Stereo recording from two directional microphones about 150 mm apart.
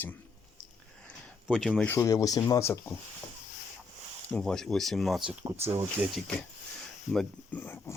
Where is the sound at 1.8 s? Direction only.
15° left (ahead or behind).